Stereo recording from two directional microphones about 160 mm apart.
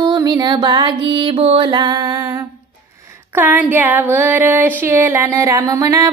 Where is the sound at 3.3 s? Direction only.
10° right (ahead or behind).